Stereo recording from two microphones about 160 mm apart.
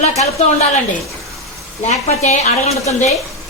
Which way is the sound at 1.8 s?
45° left (ahead or behind).